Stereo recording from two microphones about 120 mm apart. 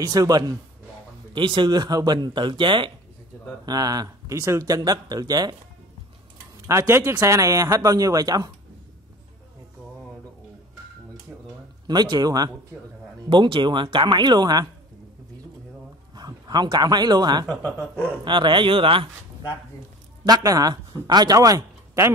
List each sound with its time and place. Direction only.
0.0 s speech: 30° right (ahead or behind)
1.3 s speech: 45° right (ahead or behind)
3.6 s speech: 30° right (ahead or behind)
6.7 s speech: 20° right (ahead or behind)
11.9 s speech: 35° right (ahead or behind)
16.2 s a sound: 35° right (ahead or behind)
16.7 s speech: 35° right (ahead or behind)
20.2 s speech: 30° right (ahead or behind)